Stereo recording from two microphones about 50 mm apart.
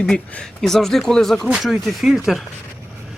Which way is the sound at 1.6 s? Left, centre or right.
Centre.